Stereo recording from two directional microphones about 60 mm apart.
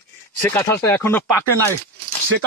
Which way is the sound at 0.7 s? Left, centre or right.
Left.